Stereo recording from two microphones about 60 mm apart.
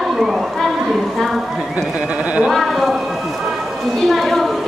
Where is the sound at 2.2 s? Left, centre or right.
Right.